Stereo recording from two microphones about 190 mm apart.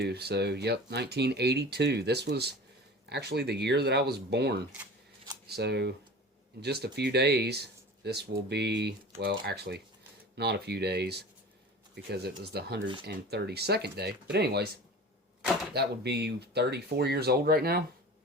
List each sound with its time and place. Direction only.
0.0 s speech: 60° right (ahead or behind)
15.7 s speech: 60° right (ahead or behind)